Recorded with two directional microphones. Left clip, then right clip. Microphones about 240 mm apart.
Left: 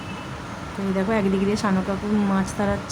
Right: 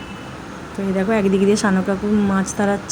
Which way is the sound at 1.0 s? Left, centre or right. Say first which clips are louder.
Right 5 dB; centre.